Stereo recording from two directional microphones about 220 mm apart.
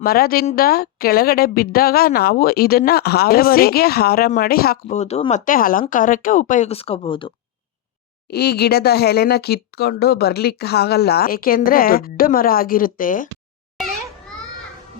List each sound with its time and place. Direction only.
0.0 s speech: 45° left (ahead or behind)
4.9 s speech: 30° left (ahead or behind)
8.3 s speech: 45° left (ahead or behind)